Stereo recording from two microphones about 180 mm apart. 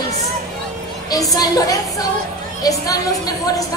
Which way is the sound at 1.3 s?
20° left (ahead or behind).